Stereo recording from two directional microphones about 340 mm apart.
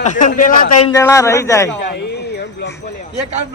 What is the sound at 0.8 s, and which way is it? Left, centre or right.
Speech, centre.